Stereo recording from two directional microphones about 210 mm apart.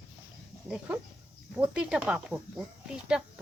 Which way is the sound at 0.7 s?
5° right (ahead or behind).